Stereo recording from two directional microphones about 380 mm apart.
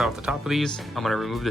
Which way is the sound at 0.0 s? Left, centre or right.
Centre.